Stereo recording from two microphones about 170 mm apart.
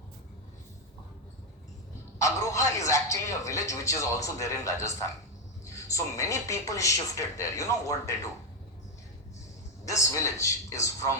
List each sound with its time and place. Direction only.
2.1 s speech: 20° left (ahead or behind)
9.8 s a man's voice: 20° left (ahead or behind)